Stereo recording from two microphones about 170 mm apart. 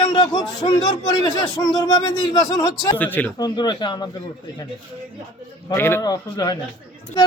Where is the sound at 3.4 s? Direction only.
25° left (ahead or behind).